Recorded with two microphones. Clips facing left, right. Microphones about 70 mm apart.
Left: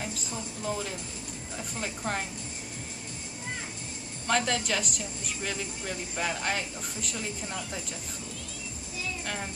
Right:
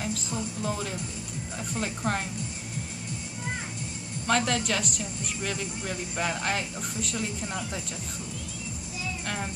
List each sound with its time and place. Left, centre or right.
0.0 s speech: centre
4.3 s speech: centre